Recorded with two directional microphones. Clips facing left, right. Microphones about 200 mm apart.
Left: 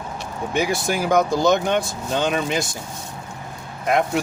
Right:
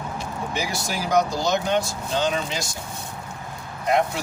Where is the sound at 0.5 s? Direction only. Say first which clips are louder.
Left 8 dB; 55° left (ahead or behind).